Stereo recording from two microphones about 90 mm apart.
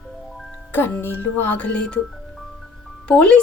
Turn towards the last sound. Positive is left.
turn(degrees=10)  # may be behind; listen again after turning